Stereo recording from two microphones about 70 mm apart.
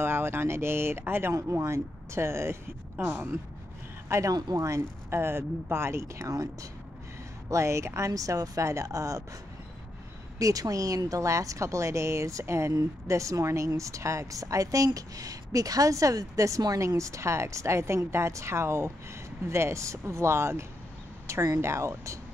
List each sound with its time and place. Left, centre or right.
0.0 s speech: right
4.3 s speech: right
4.6 s a woman's voice: right
10.4 s a woman's voice: right